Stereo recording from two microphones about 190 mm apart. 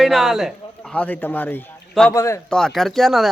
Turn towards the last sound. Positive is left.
turn(degrees=0)  # may be behind; listen again after turning